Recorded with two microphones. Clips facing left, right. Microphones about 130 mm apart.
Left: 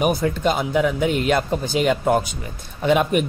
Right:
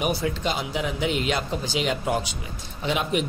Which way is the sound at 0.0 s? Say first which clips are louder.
Left 6 dB; 50° left (ahead or behind).